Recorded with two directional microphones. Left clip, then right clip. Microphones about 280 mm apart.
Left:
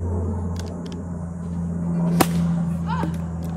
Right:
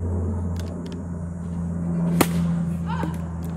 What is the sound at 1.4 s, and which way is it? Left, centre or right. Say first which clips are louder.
Whip: left 1 dB; centre.